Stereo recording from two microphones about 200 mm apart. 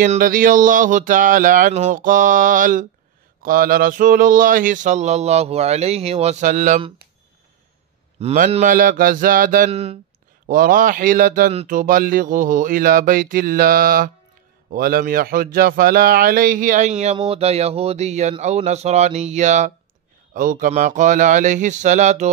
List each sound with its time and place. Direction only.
0.0 s speech: 40° right (ahead or behind)
8.2 s speech: 30° right (ahead or behind)
9.7 s speech: 30° right (ahead or behind)
10.5 s speech: 45° right (ahead or behind)